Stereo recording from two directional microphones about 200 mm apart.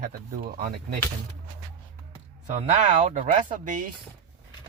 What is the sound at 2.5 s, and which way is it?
Speech, 35° right (ahead or behind).